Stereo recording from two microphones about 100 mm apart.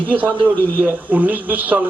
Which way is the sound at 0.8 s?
15° right (ahead or behind).